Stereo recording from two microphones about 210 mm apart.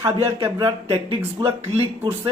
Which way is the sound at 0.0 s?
20° right (ahead or behind).